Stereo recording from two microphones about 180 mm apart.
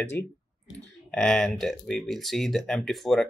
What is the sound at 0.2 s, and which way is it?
Speech, 10° left (ahead or behind).